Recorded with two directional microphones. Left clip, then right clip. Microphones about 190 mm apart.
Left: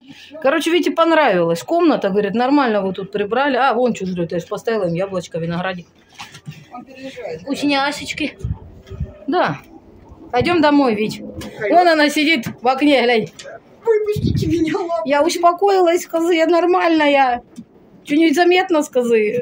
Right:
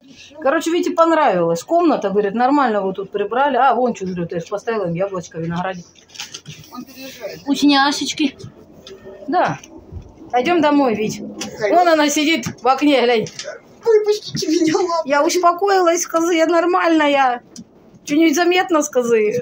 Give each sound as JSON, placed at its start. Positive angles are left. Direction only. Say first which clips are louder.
{"t": 0.4, "sound": "speech", "louder": "left 1 dB", "side_deg": 20}
{"t": 7.4, "sound": "speech", "louder": "right 4 dB", "side_deg": 10}
{"t": 10.3, "sound": "speech", "louder": "left 1 dB", "side_deg": 20}
{"t": 14.4, "sound": "speech", "louder": "right 3 dB", "side_deg": 0}
{"t": 15.0, "sound": "speech", "louder": "left 2 dB", "side_deg": 15}